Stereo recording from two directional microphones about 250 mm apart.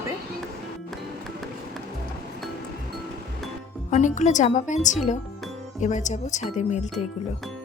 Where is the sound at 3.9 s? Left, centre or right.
Left.